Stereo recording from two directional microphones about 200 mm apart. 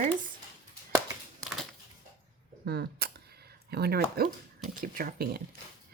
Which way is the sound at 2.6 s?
55° right (ahead or behind).